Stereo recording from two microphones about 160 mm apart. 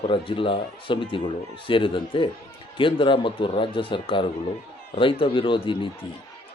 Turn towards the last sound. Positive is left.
turn(degrees=30)  # may be behind; listen again after turning